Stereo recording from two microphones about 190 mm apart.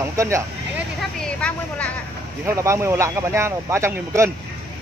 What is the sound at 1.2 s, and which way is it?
Vehicle, 5° left (ahead or behind).